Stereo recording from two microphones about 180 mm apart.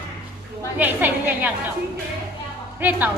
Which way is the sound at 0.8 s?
10° right (ahead or behind).